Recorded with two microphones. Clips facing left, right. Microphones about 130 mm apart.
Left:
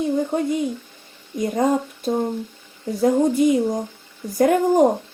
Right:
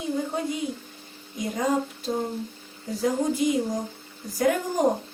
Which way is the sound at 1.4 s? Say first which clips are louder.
Left 6 dB; 50° left (ahead or behind).